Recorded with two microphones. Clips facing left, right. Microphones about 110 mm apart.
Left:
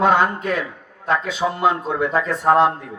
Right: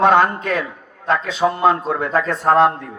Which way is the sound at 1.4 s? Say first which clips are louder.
Right 6 dB; 40° right (ahead or behind).